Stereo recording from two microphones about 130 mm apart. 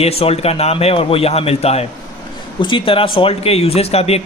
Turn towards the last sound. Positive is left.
turn(degrees=50)  # may be behind; listen again after turning